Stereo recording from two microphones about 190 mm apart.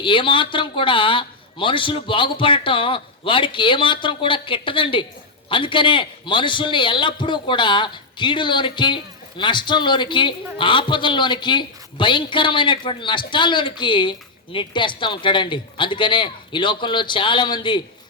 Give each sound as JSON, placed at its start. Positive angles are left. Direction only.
{"t": 0.0, "sound": "a man's voice", "side_deg": 25}